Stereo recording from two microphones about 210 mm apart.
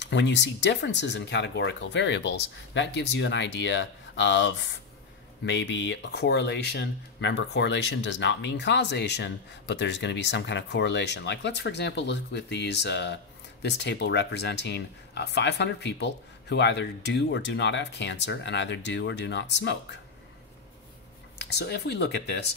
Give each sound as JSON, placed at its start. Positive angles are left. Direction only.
{"t": 0.0, "sound": "speech", "side_deg": 55}
{"t": 21.4, "sound": "speech", "side_deg": 50}